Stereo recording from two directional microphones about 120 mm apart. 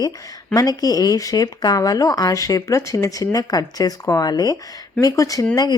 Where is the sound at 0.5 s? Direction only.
30° left (ahead or behind).